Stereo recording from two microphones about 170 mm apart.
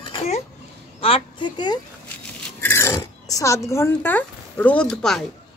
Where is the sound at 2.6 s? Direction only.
15° left (ahead or behind).